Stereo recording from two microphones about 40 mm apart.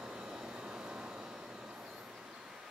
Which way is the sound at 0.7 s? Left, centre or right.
Right.